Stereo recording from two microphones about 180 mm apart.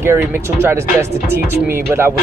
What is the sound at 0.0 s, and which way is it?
Speech, 15° right (ahead or behind).